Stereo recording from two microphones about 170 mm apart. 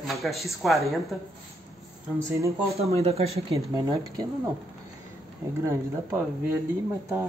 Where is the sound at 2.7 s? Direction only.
35° right (ahead or behind).